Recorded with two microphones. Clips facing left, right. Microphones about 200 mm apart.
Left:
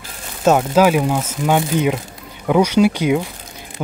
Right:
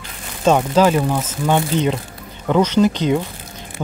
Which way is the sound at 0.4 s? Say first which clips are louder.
Left 1 dB; 5° left (ahead or behind).